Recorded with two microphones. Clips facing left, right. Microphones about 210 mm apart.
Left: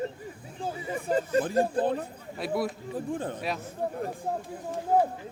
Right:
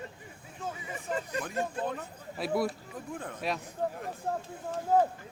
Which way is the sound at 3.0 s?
30° left (ahead or behind).